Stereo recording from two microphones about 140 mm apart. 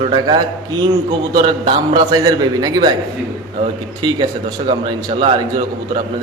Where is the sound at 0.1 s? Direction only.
30° right (ahead or behind).